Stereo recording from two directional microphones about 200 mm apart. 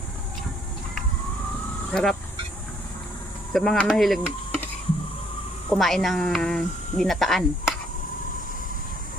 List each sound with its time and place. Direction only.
1.9 s speech: 5° left (ahead or behind)
3.5 s speech: 5° left (ahead or behind)
5.7 s speech: centre (ahead or behind)